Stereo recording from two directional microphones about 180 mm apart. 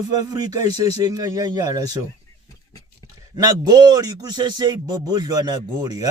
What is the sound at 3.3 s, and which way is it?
Speech, 20° right (ahead or behind).